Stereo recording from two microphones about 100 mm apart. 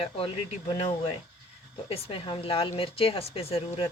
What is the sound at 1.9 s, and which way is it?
Speech, 75° left (ahead or behind).